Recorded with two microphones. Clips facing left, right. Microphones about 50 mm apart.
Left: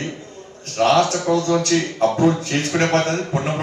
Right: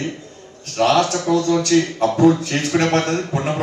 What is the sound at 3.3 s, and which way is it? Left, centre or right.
Speech, right.